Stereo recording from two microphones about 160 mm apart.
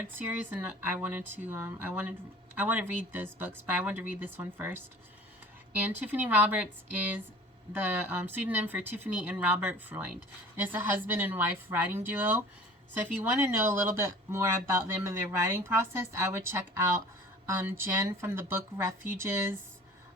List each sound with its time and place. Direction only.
0.2 s speech: 10° right (ahead or behind)
6.0 s speech: 10° right (ahead or behind)
7.7 s speech: 10° right (ahead or behind)